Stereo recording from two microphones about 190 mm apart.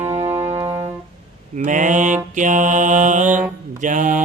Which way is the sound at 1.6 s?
40° right (ahead or behind).